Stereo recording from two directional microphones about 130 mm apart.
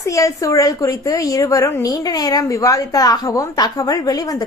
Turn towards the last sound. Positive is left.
turn(degrees=30)  # may be behind; listen again after turning